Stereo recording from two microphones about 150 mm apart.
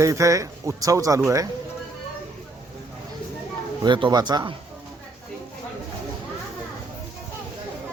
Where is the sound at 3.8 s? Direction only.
30° right (ahead or behind).